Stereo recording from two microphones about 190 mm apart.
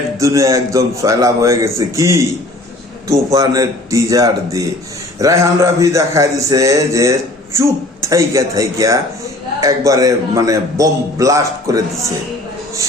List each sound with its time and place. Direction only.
0.2 s speech: 15° right (ahead or behind)